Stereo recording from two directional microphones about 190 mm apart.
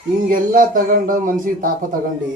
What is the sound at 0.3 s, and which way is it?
A man's voice, 45° right (ahead or behind).